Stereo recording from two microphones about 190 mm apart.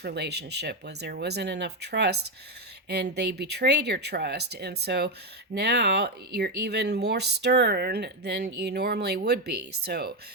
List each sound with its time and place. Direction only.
0.0 s speech: 60° right (ahead or behind)